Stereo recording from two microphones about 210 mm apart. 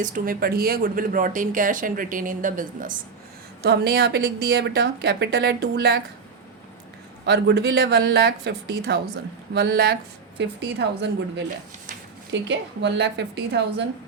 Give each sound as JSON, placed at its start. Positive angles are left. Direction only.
{"t": 0.0, "sound": "speech", "side_deg": -40}
{"t": 3.6, "sound": "speech", "side_deg": -50}
{"t": 7.3, "sound": "a woman's voice", "side_deg": -55}